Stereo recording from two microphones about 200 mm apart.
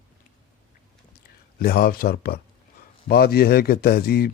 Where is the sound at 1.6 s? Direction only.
50° left (ahead or behind).